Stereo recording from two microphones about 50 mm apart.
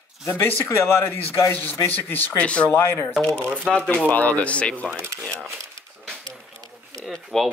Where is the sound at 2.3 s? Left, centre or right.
Left.